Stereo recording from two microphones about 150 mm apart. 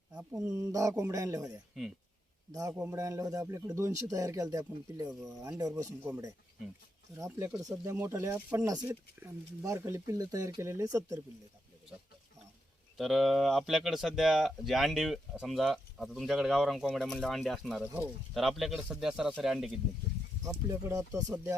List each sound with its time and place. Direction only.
0.3 s speech: 20° right (ahead or behind)
1.7 s speech: centre (ahead or behind)
2.5 s speech: 25° right (ahead or behind)
7.2 s speech: 15° right (ahead or behind)
8.6 s speech: 25° right (ahead or behind)
8.9 s speech: 15° right (ahead or behind)
13.0 s speech: centre (ahead or behind)
20.9 s speech: 25° right (ahead or behind)